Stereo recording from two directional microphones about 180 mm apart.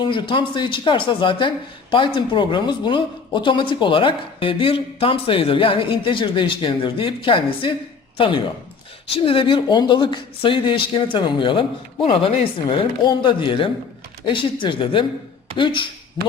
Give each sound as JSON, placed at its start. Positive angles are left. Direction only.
{"t": 0.0, "sound": "a woman's voice", "side_deg": 25}